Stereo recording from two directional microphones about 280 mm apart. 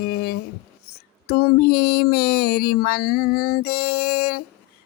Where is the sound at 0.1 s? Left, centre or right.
Left.